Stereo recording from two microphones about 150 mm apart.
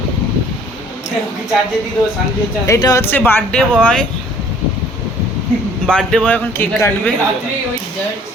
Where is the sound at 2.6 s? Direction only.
20° left (ahead or behind).